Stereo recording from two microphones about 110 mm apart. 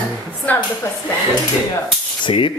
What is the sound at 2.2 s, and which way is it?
Speech, 50° left (ahead or behind).